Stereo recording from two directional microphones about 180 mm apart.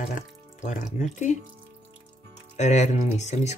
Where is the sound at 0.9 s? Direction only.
45° left (ahead or behind).